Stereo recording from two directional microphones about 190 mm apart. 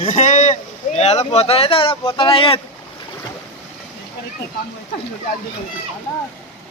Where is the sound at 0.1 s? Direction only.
40° left (ahead or behind).